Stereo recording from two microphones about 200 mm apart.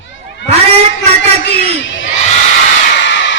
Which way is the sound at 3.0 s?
65° left (ahead or behind).